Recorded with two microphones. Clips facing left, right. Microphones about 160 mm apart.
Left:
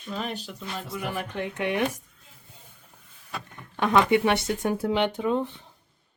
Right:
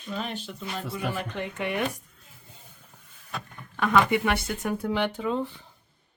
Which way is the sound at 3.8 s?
20° left (ahead or behind).